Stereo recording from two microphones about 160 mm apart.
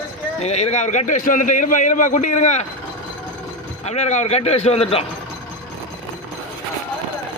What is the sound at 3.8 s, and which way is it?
A man's voice, 45° left (ahead or behind).